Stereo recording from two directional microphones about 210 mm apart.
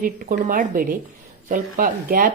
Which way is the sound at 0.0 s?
40° right (ahead or behind).